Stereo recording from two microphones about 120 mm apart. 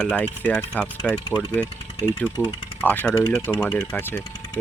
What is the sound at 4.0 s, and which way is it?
Speech, 15° left (ahead or behind).